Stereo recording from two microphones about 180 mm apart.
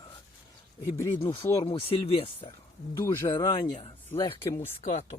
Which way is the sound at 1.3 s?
15° left (ahead or behind).